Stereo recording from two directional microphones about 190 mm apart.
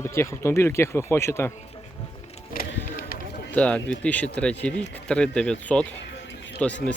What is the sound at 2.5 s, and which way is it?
Bird, 50° left (ahead or behind).